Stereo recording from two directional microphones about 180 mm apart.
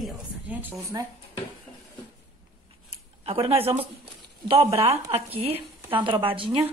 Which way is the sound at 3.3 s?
30° right (ahead or behind).